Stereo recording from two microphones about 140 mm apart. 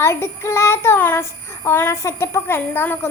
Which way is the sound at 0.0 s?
20° left (ahead or behind).